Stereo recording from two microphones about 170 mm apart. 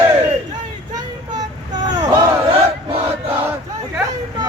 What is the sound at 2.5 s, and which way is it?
Crowd, 35° right (ahead or behind).